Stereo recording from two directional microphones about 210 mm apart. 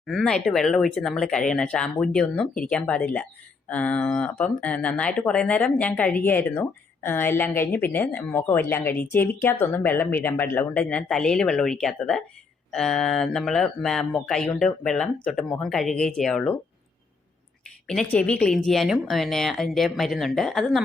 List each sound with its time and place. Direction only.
0.0 s speech: centre (ahead or behind)
17.8 s speech: 5° left (ahead or behind)